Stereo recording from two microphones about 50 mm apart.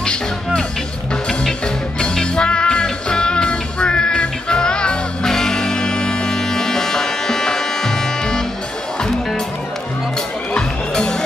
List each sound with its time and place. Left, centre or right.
0.0 s music: centre
2.0 s music: centre
10.5 s music: centre